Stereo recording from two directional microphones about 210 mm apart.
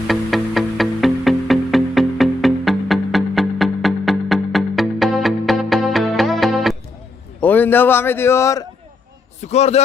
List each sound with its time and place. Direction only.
0.1 s music: centre (ahead or behind)
7.4 s speech: 10° left (ahead or behind)
9.4 s a man's voice: 30° left (ahead or behind)